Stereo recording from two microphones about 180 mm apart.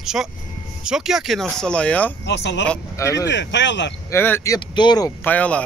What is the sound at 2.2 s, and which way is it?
Speech, 80° left.